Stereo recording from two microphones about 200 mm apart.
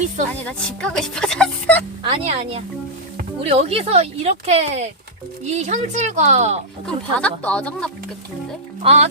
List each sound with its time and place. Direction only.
0.4 s speech: 5° left (ahead or behind)
2.0 s speech: 25° right (ahead or behind)
6.8 s speech: 5° left (ahead or behind)
8.8 s speech: 30° right (ahead or behind)